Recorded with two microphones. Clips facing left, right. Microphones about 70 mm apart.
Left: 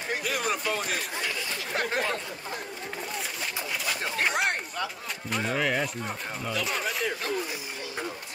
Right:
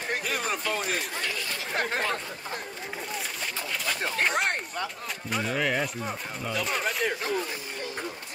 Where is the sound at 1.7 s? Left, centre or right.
Right.